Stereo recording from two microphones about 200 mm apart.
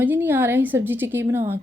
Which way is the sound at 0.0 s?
10° right (ahead or behind).